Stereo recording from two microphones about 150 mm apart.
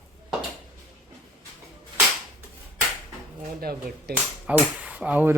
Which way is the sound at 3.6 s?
90° right.